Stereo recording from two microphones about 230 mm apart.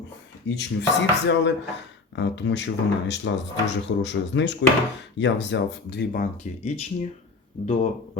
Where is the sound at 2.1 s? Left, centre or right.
Left.